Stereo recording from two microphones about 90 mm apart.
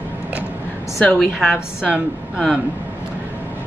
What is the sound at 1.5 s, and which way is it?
Speech, 10° right (ahead or behind).